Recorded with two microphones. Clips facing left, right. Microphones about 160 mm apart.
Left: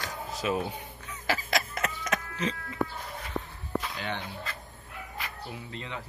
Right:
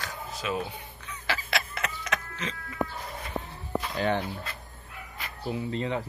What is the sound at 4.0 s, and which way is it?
Speech, 40° right (ahead or behind).